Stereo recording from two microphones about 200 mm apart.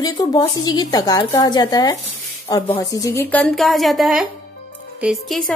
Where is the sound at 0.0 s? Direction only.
20° left (ahead or behind).